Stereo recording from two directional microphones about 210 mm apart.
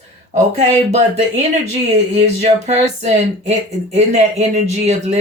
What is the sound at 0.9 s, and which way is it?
Speech, 30° right (ahead or behind).